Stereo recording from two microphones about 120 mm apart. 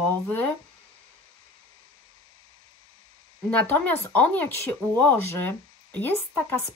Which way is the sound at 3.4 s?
15° left (ahead or behind).